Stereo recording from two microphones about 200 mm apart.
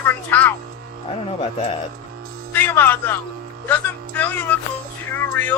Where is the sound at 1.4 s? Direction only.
30° left (ahead or behind).